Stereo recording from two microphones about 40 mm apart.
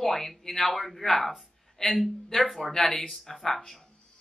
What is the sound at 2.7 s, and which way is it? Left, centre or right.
Speech, centre.